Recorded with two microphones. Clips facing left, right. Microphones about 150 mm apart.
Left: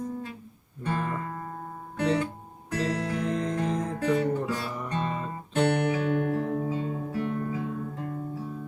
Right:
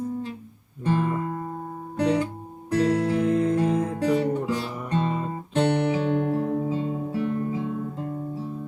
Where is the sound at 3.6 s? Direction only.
10° right (ahead or behind).